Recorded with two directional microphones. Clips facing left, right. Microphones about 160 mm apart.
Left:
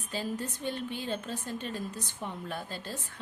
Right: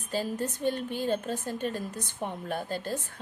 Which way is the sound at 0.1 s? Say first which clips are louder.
Right 4 dB; 45° right (ahead or behind).